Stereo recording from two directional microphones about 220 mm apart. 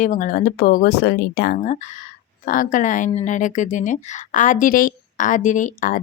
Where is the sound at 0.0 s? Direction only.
35° left (ahead or behind).